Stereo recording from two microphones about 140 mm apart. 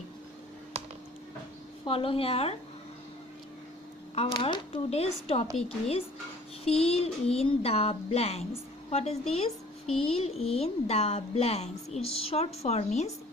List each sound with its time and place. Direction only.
1.8 s a woman's voice: 40° left (ahead or behind)
4.1 s a woman's voice: 40° left (ahead or behind)
6.7 s a woman's voice: 45° left (ahead or behind)